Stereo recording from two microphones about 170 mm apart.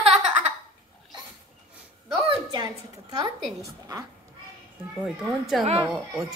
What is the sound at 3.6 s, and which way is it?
Speech, 20° right (ahead or behind).